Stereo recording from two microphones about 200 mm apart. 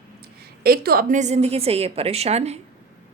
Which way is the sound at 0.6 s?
50° right (ahead or behind).